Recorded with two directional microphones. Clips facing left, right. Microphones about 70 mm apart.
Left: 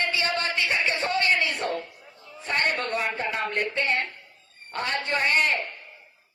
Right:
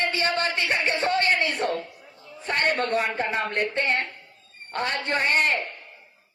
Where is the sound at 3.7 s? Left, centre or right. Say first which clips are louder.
Right 1 dB; right.